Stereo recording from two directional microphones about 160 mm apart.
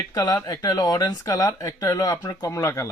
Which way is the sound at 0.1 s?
20° left (ahead or behind).